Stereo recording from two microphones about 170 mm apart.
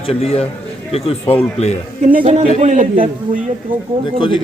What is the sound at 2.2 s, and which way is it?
A man's voice, 40° right (ahead or behind).